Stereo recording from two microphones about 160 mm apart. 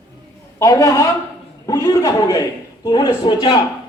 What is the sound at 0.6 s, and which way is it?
Speech, 20° left (ahead or behind).